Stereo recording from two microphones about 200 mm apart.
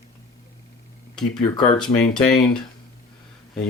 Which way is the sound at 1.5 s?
20° left (ahead or behind).